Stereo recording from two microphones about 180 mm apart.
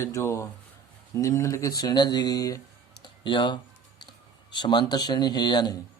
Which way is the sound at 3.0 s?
25° left (ahead or behind).